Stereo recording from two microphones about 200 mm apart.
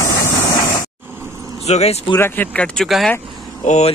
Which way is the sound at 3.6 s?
35° left (ahead or behind).